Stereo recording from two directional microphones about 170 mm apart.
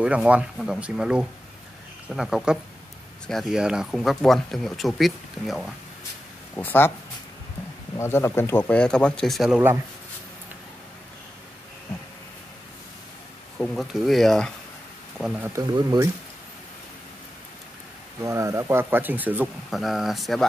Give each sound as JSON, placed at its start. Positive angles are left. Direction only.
{"t": 0.0, "sound": "speech", "side_deg": -5}
{"t": 6.5, "sound": "speech", "side_deg": 10}
{"t": 7.9, "sound": "speech", "side_deg": 15}
{"t": 13.6, "sound": "speech", "side_deg": 0}
{"t": 15.4, "sound": "speech", "side_deg": -20}
{"t": 18.2, "sound": "speech", "side_deg": -15}